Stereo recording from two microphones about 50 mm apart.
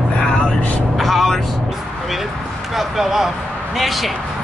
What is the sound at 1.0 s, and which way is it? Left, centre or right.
Speech, centre.